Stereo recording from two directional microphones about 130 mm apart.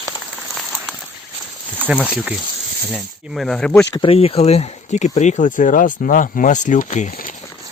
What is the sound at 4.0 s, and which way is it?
Speech, 45° left (ahead or behind).